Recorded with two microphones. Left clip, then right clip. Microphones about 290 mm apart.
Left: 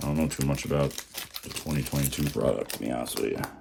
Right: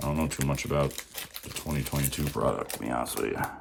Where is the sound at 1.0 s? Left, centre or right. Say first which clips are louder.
Left 2 dB; left.